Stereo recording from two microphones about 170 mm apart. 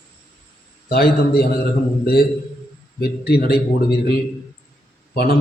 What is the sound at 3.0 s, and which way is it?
Speech, 70° left (ahead or behind).